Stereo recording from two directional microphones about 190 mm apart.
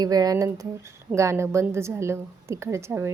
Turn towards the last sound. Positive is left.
turn(degrees=-15)  # may be behind; listen again after turning